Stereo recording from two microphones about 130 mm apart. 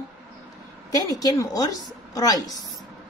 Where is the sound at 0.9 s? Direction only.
30° left (ahead or behind).